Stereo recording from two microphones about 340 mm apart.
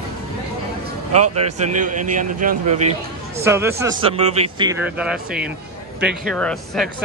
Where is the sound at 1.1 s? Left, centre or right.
Centre.